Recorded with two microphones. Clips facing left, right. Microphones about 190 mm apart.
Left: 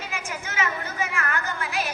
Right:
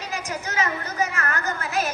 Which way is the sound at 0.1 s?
40° right (ahead or behind).